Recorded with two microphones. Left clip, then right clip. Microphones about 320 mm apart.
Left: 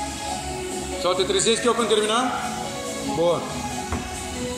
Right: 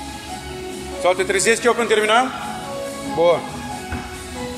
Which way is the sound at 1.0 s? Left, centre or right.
Centre.